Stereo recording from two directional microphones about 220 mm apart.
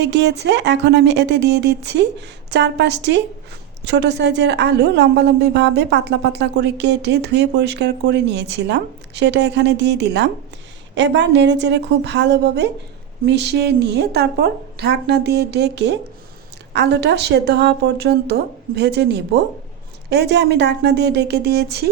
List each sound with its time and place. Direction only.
0.0 s a woman's voice: 50° right (ahead or behind)